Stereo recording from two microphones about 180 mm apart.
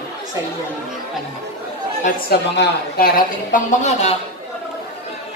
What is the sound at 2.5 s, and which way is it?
Speech, 65° left (ahead or behind).